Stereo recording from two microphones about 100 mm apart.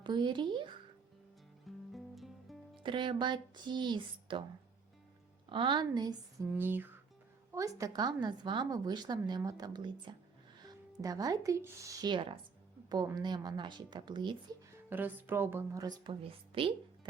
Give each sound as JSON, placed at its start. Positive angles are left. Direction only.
{"t": 0.0, "sound": "speech", "side_deg": -50}
{"t": 1.6, "sound": "music", "side_deg": 0}
{"t": 2.8, "sound": "speech", "side_deg": -55}
{"t": 5.5, "sound": "speech", "side_deg": -55}
{"t": 6.5, "sound": "speech", "side_deg": -20}
{"t": 7.5, "sound": "a woman's voice", "side_deg": -35}
{"t": 10.9, "sound": "a woman's voice", "side_deg": -40}
{"t": 12.0, "sound": "speech", "side_deg": -55}
{"t": 13.1, "sound": "speech", "side_deg": -45}
{"t": 14.8, "sound": "speech", "side_deg": -20}
{"t": 15.7, "sound": "a woman's voice", "side_deg": -40}
{"t": 16.0, "sound": "a woman's voice", "side_deg": -65}